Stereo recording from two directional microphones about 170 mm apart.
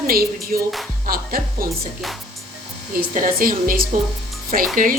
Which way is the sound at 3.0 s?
55° right (ahead or behind).